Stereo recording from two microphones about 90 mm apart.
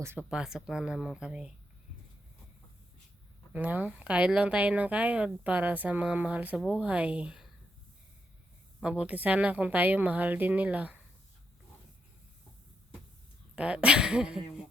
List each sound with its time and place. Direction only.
0.0 s speech: 30° right (ahead or behind)
0.3 s speech: 5° right (ahead or behind)
3.5 s speech: 20° right (ahead or behind)
8.8 s speech: 10° right (ahead or behind)
13.6 s speech: 10° right (ahead or behind)